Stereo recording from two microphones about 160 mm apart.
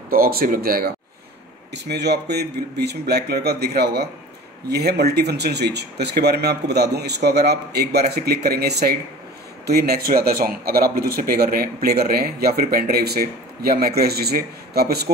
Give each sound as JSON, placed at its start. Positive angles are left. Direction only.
{"t": 0.1, "sound": "speech", "side_deg": -65}
{"t": 1.7, "sound": "speech", "side_deg": -90}